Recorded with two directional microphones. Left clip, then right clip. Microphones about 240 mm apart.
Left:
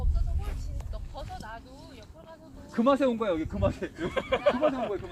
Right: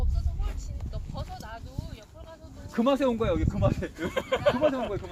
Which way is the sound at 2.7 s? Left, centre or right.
Right.